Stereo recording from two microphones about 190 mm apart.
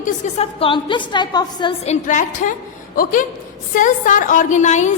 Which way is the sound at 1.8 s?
40° left (ahead or behind).